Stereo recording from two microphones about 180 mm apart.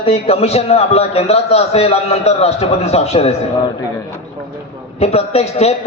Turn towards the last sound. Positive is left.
turn(degrees=35)  # may be behind; listen again after turning